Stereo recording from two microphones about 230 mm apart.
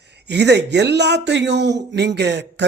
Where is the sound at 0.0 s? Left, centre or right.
Right.